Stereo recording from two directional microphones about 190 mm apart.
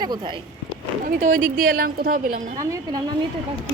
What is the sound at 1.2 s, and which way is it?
A woman's voice, 45° right (ahead or behind).